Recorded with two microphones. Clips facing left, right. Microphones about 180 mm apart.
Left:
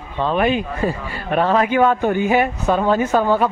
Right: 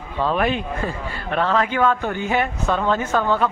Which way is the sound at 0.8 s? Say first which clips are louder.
Left 4 dB; 15° left (ahead or behind).